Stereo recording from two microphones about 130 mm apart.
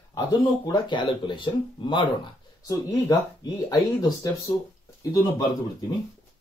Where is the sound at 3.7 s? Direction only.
30° left (ahead or behind).